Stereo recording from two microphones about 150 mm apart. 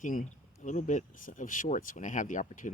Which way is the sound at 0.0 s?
60° left (ahead or behind).